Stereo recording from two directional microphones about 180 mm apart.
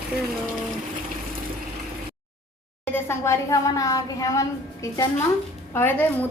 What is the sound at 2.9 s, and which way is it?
A woman's voice, 15° left (ahead or behind).